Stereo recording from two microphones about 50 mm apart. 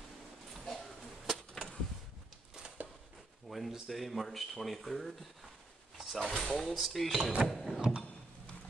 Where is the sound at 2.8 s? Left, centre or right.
Right.